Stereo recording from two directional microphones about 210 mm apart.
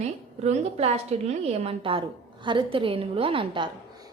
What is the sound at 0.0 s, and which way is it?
A woman's voice, 30° right (ahead or behind).